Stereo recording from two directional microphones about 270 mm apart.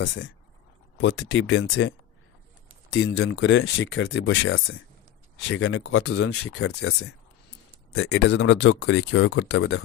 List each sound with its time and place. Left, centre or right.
0.0 s speech: left